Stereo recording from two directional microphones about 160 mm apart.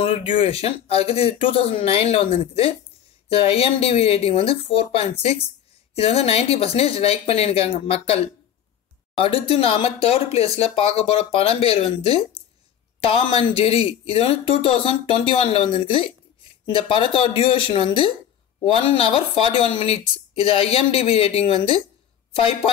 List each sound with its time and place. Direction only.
0.0 s speech: 35° left (ahead or behind)